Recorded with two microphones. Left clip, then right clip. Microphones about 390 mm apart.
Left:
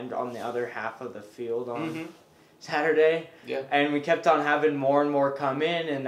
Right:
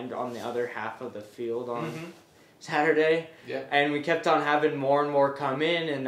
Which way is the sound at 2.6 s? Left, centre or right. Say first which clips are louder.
Left 1 dB; centre.